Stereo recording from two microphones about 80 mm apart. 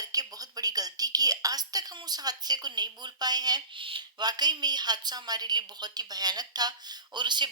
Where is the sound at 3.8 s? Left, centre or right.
Right.